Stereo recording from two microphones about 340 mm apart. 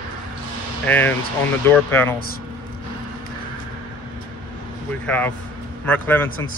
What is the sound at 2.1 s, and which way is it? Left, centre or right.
Speech, left.